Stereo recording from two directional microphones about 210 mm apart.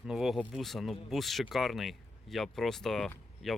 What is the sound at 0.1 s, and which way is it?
Speech, centre (ahead or behind).